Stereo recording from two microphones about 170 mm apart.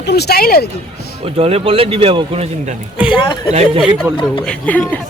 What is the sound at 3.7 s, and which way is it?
A woman's voice, centre (ahead or behind).